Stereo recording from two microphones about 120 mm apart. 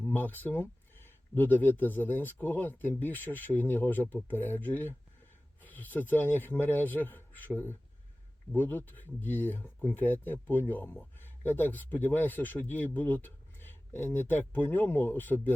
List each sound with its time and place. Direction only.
0.0 s speech: 15° left (ahead or behind)